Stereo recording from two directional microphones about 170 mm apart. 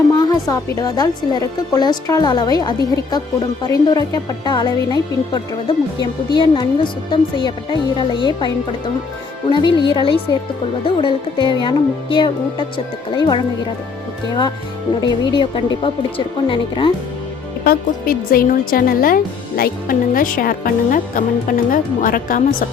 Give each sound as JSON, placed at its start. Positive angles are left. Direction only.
{"t": 0.2, "sound": "speech", "side_deg": 20}
{"t": 15.0, "sound": "speech", "side_deg": 25}
{"t": 17.6, "sound": "a woman's voice", "side_deg": 60}